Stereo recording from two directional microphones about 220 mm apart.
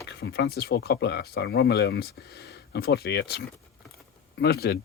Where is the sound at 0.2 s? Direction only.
50° left (ahead or behind).